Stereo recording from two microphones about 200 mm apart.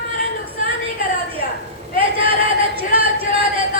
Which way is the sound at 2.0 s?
30° right (ahead or behind).